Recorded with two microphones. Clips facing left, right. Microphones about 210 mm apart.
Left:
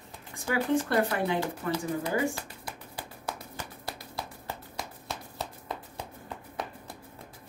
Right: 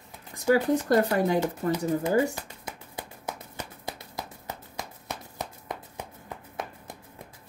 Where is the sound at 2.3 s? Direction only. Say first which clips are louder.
Right 1 dB; 20° right (ahead or behind).